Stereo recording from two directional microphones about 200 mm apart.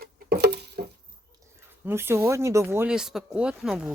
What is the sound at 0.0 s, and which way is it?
Patter, 55° right (ahead or behind).